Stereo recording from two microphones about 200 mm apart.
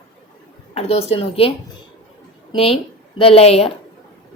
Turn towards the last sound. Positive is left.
turn(degrees=30)  # may be behind; listen again after turning